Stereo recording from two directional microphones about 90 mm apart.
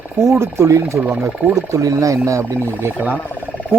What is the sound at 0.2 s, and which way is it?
Speech, 30° right (ahead or behind).